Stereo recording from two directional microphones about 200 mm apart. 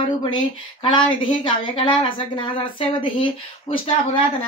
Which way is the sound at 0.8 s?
25° left (ahead or behind).